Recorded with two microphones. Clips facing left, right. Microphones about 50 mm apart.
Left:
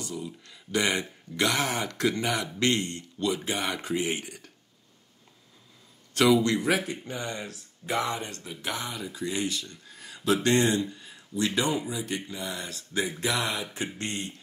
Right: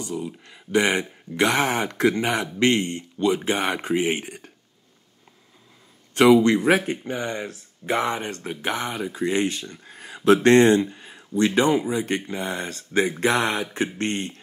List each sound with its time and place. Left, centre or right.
0.0 s speech: right
6.1 s speech: right
10.3 s speech: right